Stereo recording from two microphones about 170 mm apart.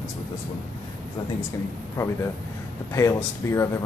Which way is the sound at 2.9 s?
15° left (ahead or behind).